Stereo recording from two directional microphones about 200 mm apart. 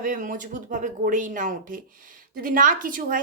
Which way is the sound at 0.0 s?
40° right (ahead or behind).